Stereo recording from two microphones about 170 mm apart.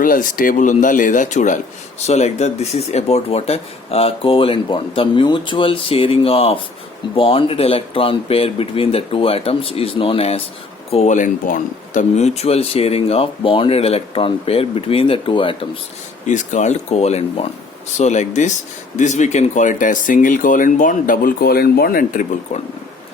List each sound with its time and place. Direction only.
0.0 s speech: 55° left (ahead or behind); by 15.8 s 30° left (ahead or behind)
16.2 s speech: 45° left (ahead or behind)